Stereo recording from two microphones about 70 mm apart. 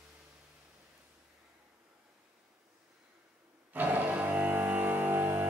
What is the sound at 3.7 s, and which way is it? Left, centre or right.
Music, right.